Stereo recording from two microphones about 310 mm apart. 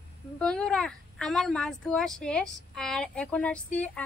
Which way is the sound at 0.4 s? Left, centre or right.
Centre.